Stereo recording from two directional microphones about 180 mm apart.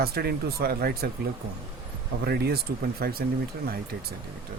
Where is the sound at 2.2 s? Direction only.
60° right (ahead or behind).